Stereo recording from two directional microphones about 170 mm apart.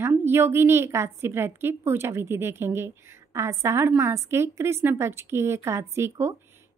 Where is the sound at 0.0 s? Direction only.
15° right (ahead or behind).